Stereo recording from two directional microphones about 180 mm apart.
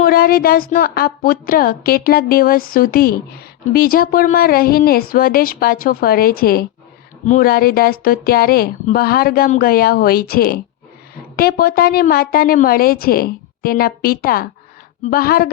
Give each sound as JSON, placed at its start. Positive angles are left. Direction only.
{"t": 0.0, "sound": "speech", "side_deg": 55}